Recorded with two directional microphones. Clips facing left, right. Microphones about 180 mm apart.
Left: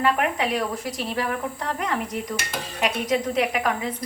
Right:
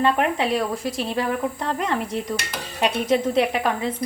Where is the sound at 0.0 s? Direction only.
30° right (ahead or behind).